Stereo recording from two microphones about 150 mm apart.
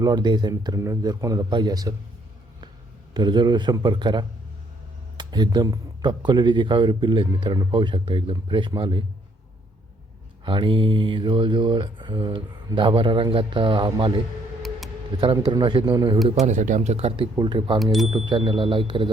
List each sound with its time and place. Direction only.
0.0 s speech: 30° right (ahead or behind)
3.2 s speech: 30° right (ahead or behind)
10.4 s speech: 35° right (ahead or behind)
15.2 s speech: 30° right (ahead or behind)
16.3 s speech: 50° right (ahead or behind)
17.3 s speech: 30° right (ahead or behind)